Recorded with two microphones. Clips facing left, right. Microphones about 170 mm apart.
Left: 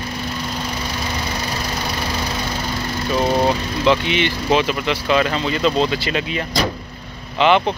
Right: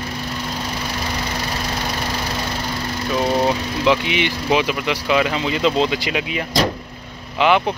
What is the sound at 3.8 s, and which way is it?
Speech, 10° right (ahead or behind).